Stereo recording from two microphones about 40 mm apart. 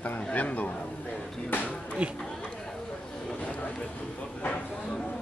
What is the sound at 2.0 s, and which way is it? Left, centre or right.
Speech, right.